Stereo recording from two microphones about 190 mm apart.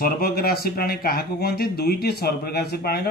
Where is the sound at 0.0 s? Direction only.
50° left (ahead or behind).